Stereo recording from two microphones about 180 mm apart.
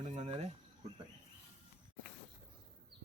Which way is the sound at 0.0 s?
40° right (ahead or behind).